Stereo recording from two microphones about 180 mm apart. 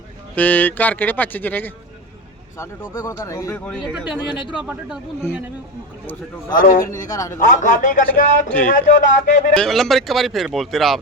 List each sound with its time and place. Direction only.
0.3 s speech: 10° left (ahead or behind)
3.7 s speech: 5° right (ahead or behind)
6.5 s a man's voice: 50° left (ahead or behind)
6.9 s a man's voice: 20° left (ahead or behind)
7.3 s a man's voice: 45° left (ahead or behind)
9.6 s speech: centre (ahead or behind)